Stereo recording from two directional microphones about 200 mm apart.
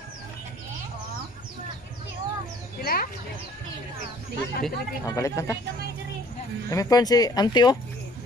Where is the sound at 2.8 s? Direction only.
45° left (ahead or behind).